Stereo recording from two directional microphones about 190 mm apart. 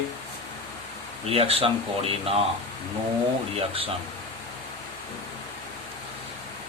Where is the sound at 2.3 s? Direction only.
30° right (ahead or behind).